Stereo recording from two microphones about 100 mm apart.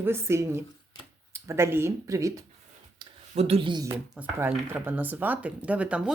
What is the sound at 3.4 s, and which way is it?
Speech, 80° right.